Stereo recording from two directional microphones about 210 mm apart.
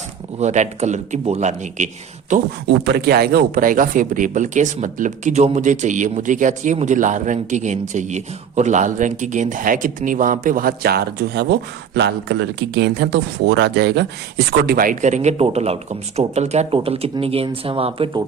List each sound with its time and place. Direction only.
0.3 s speech: 35° right (ahead or behind)
2.6 s speech: 50° right (ahead or behind); by 18.2 s 25° right (ahead or behind)